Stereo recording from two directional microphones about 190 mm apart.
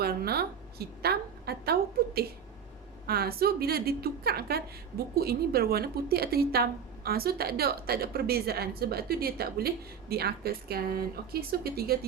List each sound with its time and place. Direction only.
0.0 s a woman's voice: 55° right (ahead or behind)